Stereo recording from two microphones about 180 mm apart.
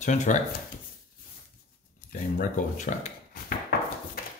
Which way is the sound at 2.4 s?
45° left (ahead or behind).